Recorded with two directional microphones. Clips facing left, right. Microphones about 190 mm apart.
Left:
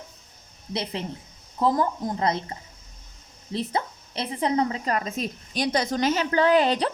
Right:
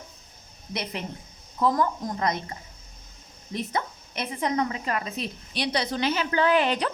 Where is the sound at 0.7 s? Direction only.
25° left (ahead or behind).